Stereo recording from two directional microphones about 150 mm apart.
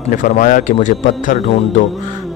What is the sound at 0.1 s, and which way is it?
Speech, 60° left (ahead or behind).